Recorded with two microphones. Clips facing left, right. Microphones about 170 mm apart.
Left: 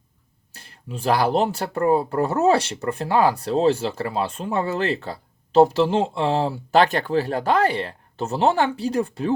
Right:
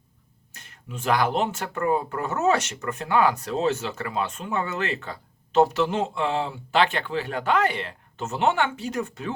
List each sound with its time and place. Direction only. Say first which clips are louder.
0.5 s speech: left 4 dB; 35° left (ahead or behind)